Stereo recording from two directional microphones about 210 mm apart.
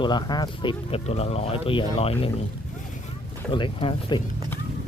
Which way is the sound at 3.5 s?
25° left (ahead or behind).